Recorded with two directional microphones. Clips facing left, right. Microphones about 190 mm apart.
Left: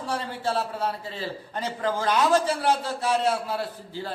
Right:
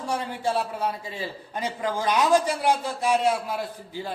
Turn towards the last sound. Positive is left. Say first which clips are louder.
# even
turn(degrees=-15)  # may be behind; listen again after turning